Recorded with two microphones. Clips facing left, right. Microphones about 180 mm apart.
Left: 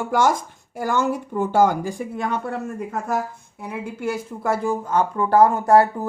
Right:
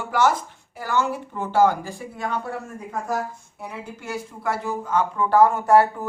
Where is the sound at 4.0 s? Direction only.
50° left (ahead or behind).